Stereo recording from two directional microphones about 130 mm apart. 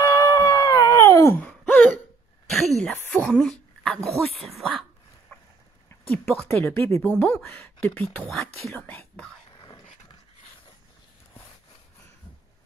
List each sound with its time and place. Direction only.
0.0 s dog: 25° left (ahead or behind)
1.4 s a sound: 5° left (ahead or behind)
5.9 s speech: 15° left (ahead or behind)